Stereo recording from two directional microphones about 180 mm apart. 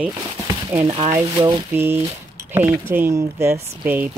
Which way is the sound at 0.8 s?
35° right (ahead or behind).